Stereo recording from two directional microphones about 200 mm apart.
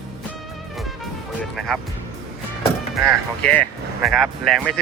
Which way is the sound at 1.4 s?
Centre (ahead or behind).